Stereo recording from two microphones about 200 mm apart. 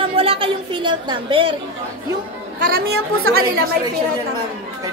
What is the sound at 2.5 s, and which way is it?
Speech, 45° right (ahead or behind).